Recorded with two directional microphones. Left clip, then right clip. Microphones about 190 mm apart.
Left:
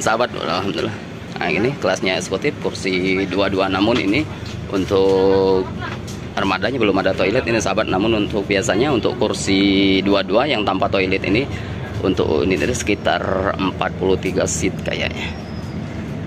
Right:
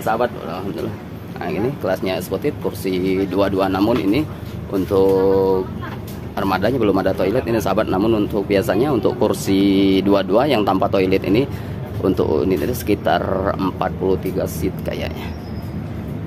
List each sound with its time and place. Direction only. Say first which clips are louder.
0.0 s speech: left 2 dB; 10° left (ahead or behind)
1.4 s speech: left 3 dB; 5° right (ahead or behind)